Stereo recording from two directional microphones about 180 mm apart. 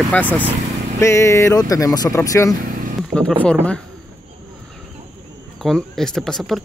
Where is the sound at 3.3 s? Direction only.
5° left (ahead or behind).